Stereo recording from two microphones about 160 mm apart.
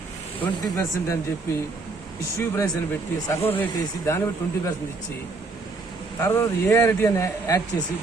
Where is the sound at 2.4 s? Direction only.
20° left (ahead or behind).